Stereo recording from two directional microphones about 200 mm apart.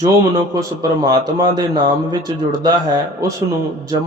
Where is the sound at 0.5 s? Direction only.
20° right (ahead or behind).